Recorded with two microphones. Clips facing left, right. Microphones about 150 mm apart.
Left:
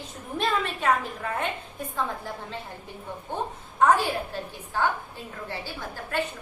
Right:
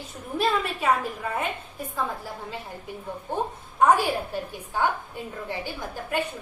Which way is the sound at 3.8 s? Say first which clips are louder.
Right 1 dB; 10° right (ahead or behind).